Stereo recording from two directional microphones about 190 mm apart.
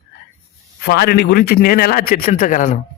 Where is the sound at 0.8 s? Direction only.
55° left (ahead or behind); by 2.8 s 40° left (ahead or behind).